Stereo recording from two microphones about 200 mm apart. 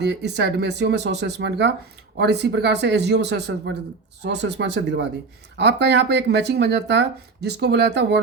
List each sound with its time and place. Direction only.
0.0 s speech: 60° right (ahead or behind)